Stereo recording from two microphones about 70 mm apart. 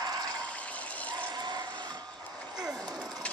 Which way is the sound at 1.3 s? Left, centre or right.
Right.